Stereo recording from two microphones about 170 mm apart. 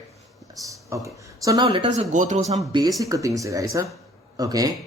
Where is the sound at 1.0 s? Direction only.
20° right (ahead or behind).